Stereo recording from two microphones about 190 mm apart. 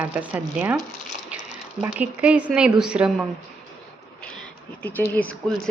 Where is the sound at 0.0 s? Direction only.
5° right (ahead or behind).